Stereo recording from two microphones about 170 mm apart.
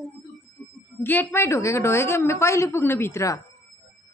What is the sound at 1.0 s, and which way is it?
A woman's voice, 15° left (ahead or behind).